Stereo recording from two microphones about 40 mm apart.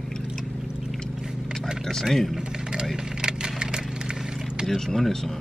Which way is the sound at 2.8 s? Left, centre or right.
Centre.